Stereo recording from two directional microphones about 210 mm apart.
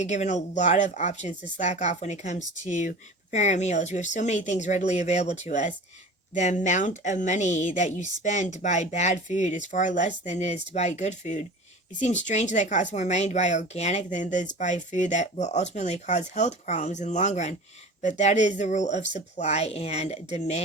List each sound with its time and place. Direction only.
0.0 s speech: 35° left (ahead or behind)